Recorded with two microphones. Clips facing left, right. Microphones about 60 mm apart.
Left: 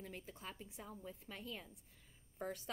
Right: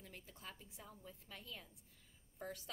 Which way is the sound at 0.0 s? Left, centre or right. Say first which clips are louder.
Left 5 dB; left.